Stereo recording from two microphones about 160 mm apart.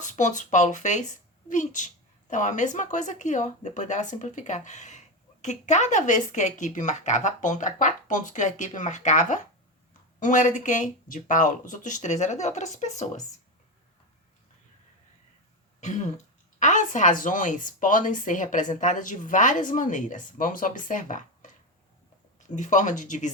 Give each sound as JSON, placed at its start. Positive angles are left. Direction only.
{"t": 0.0, "sound": "a woman's voice", "side_deg": 50}
{"t": 16.6, "sound": "a woman's voice", "side_deg": 50}